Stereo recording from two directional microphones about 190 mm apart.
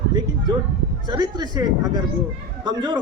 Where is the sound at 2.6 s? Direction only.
25° right (ahead or behind).